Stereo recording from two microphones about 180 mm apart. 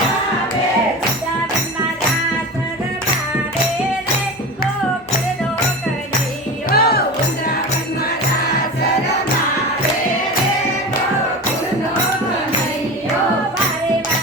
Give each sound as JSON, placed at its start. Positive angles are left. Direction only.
{"t": 6.7, "sound": "music", "side_deg": 55}